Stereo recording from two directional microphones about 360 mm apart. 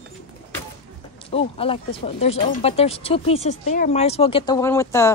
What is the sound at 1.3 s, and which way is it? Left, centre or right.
Speech, centre.